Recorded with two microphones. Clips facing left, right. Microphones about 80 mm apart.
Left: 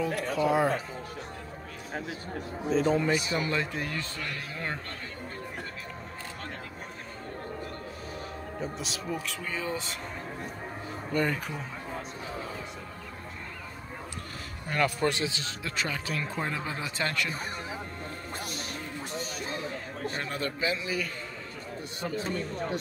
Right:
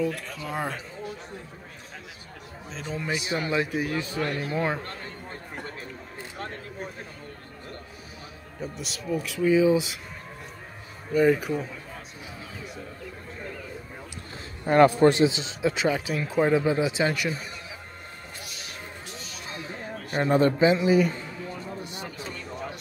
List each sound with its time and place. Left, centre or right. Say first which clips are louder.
0.0 s speech: left 2 dB; centre
2.7 s speech: left 7 dB; centre
3.4 s a man's voice: right 4 dB; centre
4.2 s speech: right 9 dB; right
8.5 s speech: right 1 dB; centre
11.1 s speech: right 8 dB; centre
14.7 s a man's voice: right 10 dB; right
20.2 s a man's voice: right 15 dB; right
22.0 s speech: left 5 dB; left